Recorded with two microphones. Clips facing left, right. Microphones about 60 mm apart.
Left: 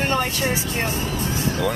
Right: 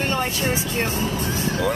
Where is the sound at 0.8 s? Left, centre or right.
Right.